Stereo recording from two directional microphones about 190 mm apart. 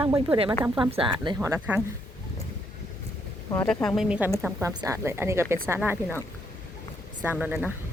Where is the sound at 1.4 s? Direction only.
15° right (ahead or behind).